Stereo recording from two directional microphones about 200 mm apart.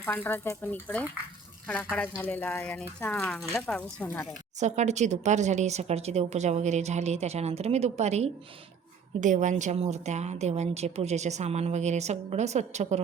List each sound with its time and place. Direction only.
0.0 s speech: 10° left (ahead or behind)
4.6 s a woman's voice: 35° right (ahead or behind)